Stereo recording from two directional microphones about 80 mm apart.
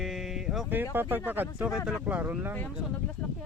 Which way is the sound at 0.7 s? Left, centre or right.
Right.